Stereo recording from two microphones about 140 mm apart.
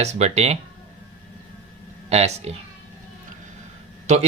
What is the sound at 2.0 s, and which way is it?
Speech, 50° right (ahead or behind).